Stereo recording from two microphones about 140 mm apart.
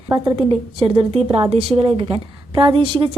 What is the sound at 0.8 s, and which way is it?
A woman's voice, 40° right (ahead or behind).